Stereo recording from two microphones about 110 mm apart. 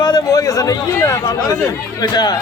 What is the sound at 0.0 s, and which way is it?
A man's voice, 35° left (ahead or behind).